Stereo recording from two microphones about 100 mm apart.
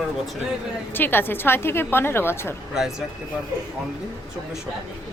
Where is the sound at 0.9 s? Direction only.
20° left (ahead or behind).